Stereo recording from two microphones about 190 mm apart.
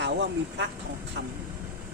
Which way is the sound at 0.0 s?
65° right (ahead or behind).